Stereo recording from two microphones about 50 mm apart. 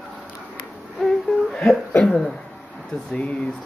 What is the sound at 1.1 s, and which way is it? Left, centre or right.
Hoot, centre.